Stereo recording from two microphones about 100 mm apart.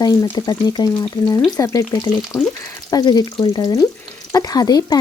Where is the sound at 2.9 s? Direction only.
45° left (ahead or behind).